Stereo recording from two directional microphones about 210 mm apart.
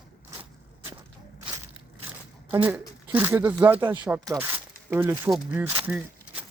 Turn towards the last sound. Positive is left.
turn(degrees=-5)  # may be behind; listen again after turning